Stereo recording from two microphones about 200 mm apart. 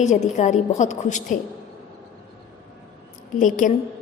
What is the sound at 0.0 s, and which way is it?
A woman's voice, 35° left (ahead or behind).